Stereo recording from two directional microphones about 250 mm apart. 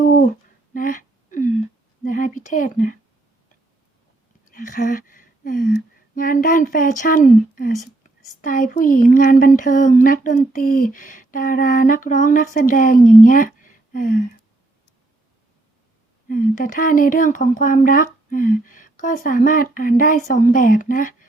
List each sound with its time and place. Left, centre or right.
0.7 s a sound: left
4.5 s speech: left
16.3 s speech: left